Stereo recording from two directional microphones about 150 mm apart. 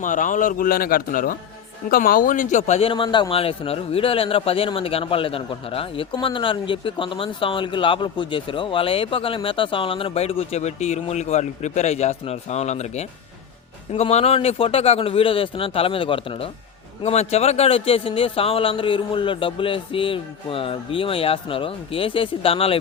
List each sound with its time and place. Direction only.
0.0 s a man's voice: 60° left (ahead or behind); by 22.8 s 40° left (ahead or behind)